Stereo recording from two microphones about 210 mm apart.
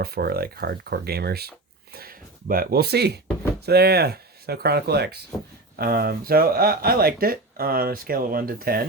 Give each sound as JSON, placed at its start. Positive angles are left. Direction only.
{"t": 0.0, "sound": "speech", "side_deg": -45}